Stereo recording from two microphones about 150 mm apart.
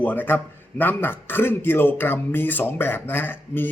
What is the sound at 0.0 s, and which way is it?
A man's voice, 10° left (ahead or behind).